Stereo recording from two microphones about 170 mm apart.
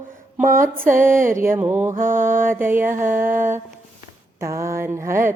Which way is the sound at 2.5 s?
10° right (ahead or behind).